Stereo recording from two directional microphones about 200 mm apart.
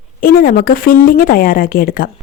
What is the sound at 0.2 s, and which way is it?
Speech, 45° left (ahead or behind).